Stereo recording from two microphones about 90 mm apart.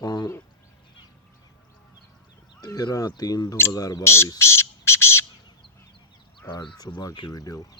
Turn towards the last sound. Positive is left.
turn(degrees=45)  # may be behind; listen again after turning